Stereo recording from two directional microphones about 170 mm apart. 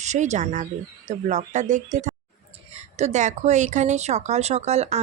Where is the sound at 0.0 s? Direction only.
45° right (ahead or behind).